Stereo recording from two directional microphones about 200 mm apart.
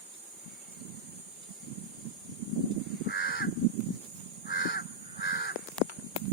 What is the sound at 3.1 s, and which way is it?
Crow, 50° left (ahead or behind).